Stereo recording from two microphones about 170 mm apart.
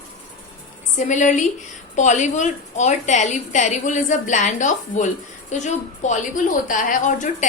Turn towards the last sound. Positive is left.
turn(degrees=45)  # may be behind; listen again after turning